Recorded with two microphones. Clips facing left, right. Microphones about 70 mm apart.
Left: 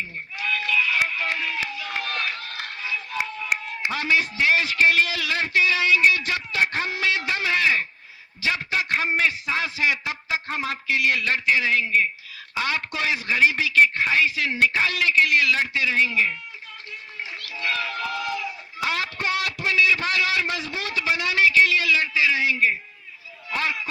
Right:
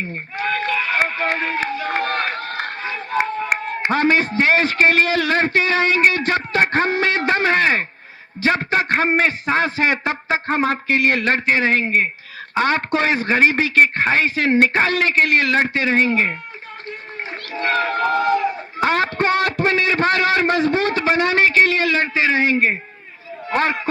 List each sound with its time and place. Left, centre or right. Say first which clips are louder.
0.0 s a sound: right 6 dB; right
8.4 s speech: right 7 dB; right
17.4 s speech: right 8 dB; right